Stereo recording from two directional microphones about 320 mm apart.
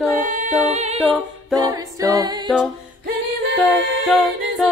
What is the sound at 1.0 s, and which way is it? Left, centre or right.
A capella, centre.